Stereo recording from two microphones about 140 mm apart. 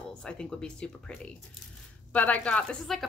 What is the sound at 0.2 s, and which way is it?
A woman's voice, 5° left (ahead or behind).